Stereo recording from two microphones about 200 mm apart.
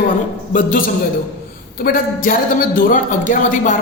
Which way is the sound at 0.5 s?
40° left (ahead or behind).